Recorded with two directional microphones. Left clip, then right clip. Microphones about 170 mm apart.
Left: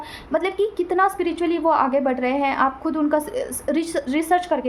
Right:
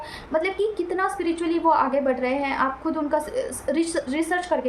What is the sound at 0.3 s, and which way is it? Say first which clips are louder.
A woman's voice: left 2 dB; 40° left (ahead or behind).